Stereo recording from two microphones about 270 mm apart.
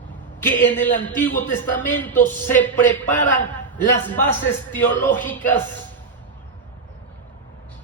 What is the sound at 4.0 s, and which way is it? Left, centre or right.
A man's voice, centre.